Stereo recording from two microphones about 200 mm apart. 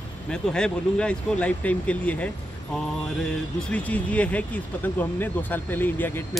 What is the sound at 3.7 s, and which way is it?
Speech, 5° left (ahead or behind).